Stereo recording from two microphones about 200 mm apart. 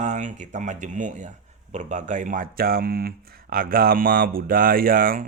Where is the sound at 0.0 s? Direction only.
35° right (ahead or behind).